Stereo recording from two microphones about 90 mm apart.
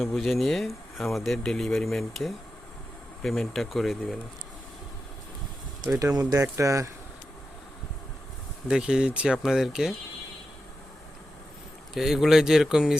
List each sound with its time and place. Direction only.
0.0 s speech: centre (ahead or behind)
5.8 s speech: 45° right (ahead or behind)
8.6 s speech: 10° right (ahead or behind)
11.9 s speech: 5° right (ahead or behind)